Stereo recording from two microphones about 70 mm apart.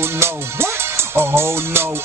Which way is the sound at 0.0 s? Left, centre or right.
Right.